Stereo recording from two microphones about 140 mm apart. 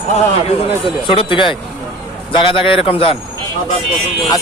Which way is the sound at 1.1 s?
35° left (ahead or behind).